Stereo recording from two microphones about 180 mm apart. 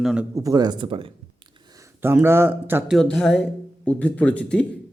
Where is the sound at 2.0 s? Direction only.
10° right (ahead or behind).